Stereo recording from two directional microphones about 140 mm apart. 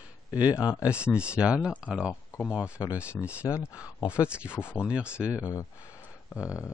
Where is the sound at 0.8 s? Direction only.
5° right (ahead or behind).